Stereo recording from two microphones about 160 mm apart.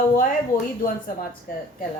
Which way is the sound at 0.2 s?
60° left (ahead or behind).